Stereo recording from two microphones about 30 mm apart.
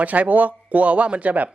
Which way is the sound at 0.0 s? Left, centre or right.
Right.